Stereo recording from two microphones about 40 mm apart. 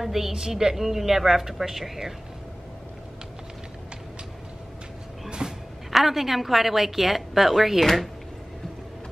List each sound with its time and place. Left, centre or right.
0.0 s a woman's voice: centre
5.4 s music: centre
5.9 s a woman's voice: centre